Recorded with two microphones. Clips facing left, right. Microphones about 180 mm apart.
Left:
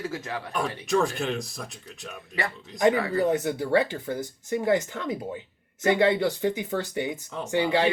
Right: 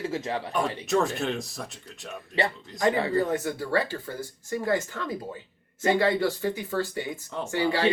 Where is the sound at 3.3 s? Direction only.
15° left (ahead or behind).